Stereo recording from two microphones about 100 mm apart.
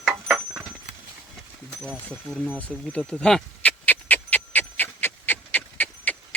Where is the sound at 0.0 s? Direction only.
Centre (ahead or behind).